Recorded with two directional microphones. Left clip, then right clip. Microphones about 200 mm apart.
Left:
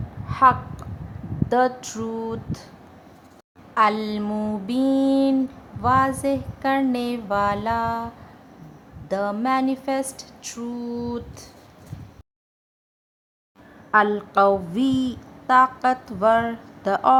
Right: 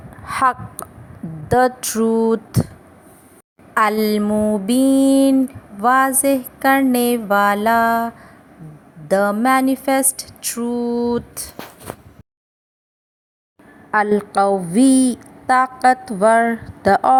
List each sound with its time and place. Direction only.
0.3 s a woman's voice: 35° right (ahead or behind)
1.5 s a sound: 30° right (ahead or behind)
3.8 s a woman's voice: 30° right (ahead or behind)
4.3 s music: 15° right (ahead or behind)
4.6 s a woman's voice: 30° right (ahead or behind)
13.9 s a woman's voice: 30° right (ahead or behind)